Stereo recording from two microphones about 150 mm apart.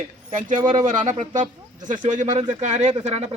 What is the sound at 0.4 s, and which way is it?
Speech, 60° right (ahead or behind).